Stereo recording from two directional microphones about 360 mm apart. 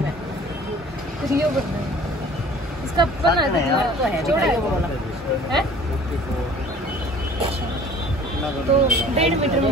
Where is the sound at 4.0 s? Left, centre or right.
Centre.